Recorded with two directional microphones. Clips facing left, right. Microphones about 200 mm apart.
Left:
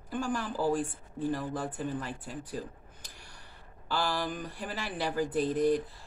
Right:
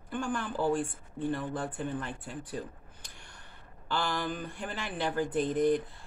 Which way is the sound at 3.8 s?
10° left (ahead or behind).